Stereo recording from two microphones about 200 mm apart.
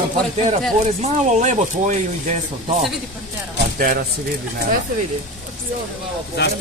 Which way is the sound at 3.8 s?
45° right (ahead or behind).